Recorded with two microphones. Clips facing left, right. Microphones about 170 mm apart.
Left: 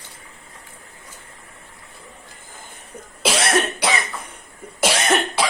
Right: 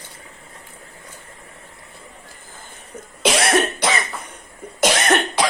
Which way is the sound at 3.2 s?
Centre (ahead or behind).